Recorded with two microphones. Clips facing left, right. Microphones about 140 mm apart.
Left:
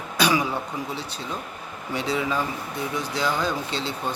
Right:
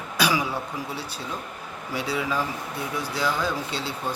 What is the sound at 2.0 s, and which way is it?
Speech, 5° right (ahead or behind).